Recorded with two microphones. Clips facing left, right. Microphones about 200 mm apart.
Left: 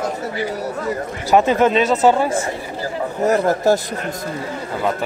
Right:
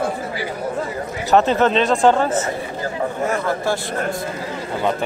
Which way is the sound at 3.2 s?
40° left (ahead or behind).